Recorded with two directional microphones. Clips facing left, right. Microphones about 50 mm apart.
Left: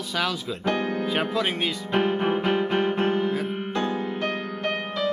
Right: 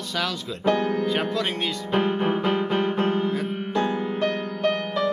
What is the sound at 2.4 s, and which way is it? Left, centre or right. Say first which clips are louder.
Music: even; left.